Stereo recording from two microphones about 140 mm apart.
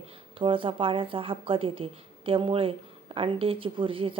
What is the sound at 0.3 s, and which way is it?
A woman's voice, 40° right (ahead or behind).